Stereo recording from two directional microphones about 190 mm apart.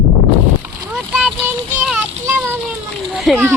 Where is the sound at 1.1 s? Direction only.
5° right (ahead or behind).